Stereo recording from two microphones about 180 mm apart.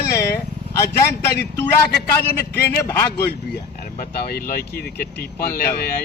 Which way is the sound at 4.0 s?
60° left (ahead or behind).